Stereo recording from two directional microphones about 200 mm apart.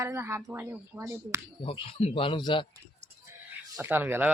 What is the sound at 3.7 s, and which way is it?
Speech, 10° right (ahead or behind).